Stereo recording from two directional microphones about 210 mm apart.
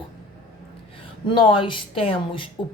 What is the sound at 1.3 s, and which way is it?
Speech, 20° left (ahead or behind).